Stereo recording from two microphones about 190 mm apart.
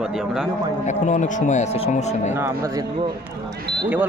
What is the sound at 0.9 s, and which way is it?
Speech, 40° left (ahead or behind).